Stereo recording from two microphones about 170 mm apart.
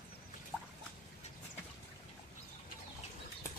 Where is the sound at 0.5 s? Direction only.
5° left (ahead or behind).